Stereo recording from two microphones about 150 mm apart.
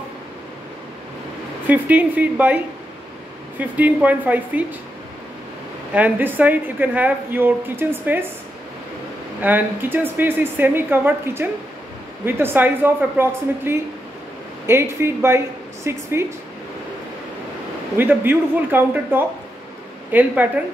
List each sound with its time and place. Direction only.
1.7 s a woman's voice: 10° right (ahead or behind)
5.9 s a woman's voice: 10° right (ahead or behind)
9.4 s a woman's voice: 10° right (ahead or behind)
17.9 s a woman's voice: 15° right (ahead or behind)